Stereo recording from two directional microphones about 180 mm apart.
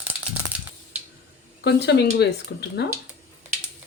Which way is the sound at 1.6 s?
65° left (ahead or behind).